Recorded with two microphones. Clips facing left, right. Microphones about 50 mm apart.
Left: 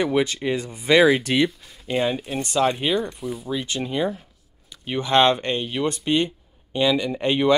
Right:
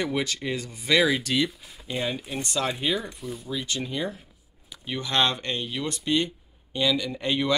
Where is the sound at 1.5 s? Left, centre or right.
Centre.